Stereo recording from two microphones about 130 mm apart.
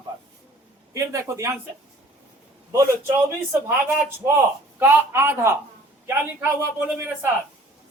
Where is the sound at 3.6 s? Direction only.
20° right (ahead or behind).